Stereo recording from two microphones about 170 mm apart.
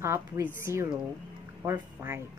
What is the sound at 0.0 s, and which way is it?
A woman's voice, 15° right (ahead or behind).